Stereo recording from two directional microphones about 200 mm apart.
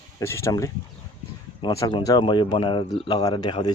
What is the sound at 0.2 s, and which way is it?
Speech, 15° left (ahead or behind).